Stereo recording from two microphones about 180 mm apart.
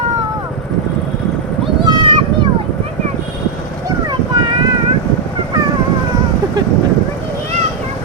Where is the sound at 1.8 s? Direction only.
25° right (ahead or behind).